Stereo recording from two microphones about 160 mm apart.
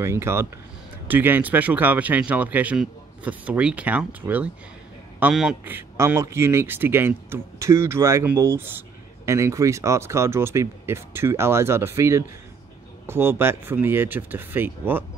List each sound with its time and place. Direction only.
0.0 s speech: 15° right (ahead or behind)